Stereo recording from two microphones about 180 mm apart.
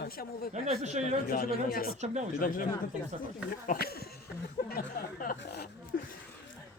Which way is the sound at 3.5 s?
55° left (ahead or behind).